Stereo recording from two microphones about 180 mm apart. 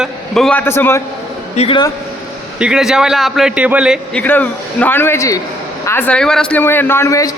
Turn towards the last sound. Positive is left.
turn(degrees=15)  # may be behind; listen again after turning